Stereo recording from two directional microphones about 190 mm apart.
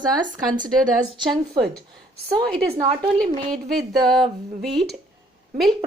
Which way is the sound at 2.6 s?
30° right (ahead or behind).